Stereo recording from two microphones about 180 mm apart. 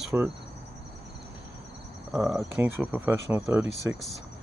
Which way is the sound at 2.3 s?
15° right (ahead or behind).